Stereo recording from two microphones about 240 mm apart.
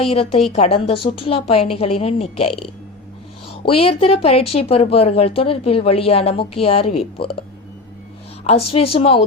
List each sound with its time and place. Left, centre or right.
0.0 s speech: left
3.7 s speech: left
8.4 s speech: left